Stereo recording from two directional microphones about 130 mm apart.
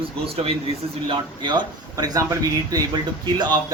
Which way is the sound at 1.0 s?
40° right (ahead or behind).